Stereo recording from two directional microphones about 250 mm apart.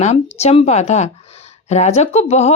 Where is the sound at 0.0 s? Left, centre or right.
Left.